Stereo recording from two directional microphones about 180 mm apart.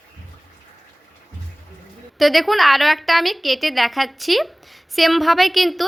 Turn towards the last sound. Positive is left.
turn(degrees=0)  # may be behind; listen again after turning